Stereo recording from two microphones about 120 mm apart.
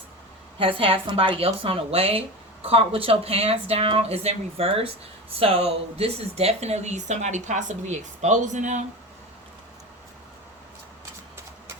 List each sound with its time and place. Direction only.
0.6 s a woman's voice: 50° right (ahead or behind); by 8.8 s 90° right